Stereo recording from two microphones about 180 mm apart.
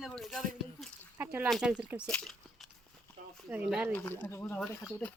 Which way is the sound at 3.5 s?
10° right (ahead or behind).